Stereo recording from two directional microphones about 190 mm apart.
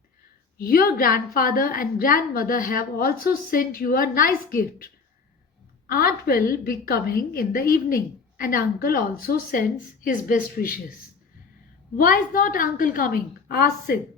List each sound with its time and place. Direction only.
0.6 s a woman's voice: 50° left (ahead or behind)
5.9 s a woman's voice: 50° left (ahead or behind)
11.9 s a woman's voice: 45° left (ahead or behind)